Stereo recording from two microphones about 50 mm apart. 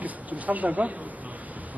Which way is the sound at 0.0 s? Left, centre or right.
Right.